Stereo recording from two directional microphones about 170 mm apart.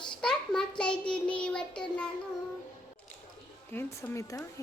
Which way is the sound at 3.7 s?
10° left (ahead or behind).